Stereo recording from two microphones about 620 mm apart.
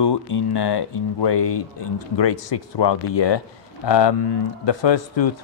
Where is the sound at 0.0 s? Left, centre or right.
Left.